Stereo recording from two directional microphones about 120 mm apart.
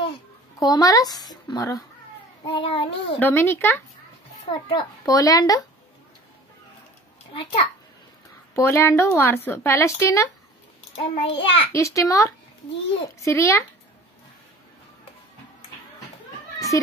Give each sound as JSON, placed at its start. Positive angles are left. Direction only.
{"t": 0.6, "sound": "a child's voice", "side_deg": 30}
{"t": 2.4, "sound": "child singing", "side_deg": 50}
{"t": 3.2, "sound": "speech", "side_deg": 20}
{"t": 4.5, "sound": "child singing", "side_deg": 45}
{"t": 5.0, "sound": "speech", "side_deg": 30}
{"t": 8.5, "sound": "speech", "side_deg": 20}
{"t": 11.0, "sound": "child singing", "side_deg": 50}
{"t": 11.7, "sound": "speech", "side_deg": 25}
{"t": 16.5, "sound": "children playing", "side_deg": 25}